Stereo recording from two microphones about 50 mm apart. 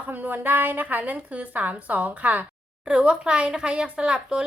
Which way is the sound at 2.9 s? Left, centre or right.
Right.